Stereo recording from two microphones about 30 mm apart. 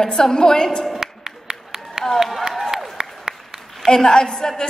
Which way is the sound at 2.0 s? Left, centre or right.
Right.